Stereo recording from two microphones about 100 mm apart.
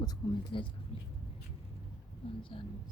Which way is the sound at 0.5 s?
60° left (ahead or behind).